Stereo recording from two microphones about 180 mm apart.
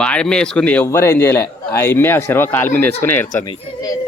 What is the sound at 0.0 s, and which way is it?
Speech, 5° left (ahead or behind).